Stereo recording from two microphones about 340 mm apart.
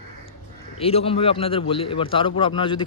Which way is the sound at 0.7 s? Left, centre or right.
Centre.